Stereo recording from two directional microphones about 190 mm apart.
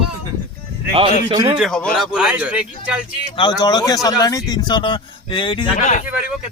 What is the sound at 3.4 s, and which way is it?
Speech, 25° left (ahead or behind).